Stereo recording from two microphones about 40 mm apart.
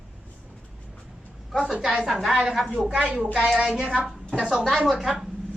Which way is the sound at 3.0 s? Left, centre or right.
Right.